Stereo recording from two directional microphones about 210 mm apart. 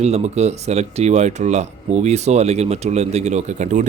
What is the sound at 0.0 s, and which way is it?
A man's voice, 30° right (ahead or behind).